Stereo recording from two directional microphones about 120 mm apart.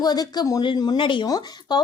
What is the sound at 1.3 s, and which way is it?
Speech, 30° left (ahead or behind).